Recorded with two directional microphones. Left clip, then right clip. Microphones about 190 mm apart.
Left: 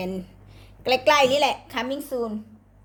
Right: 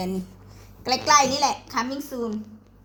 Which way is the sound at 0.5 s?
60° left (ahead or behind).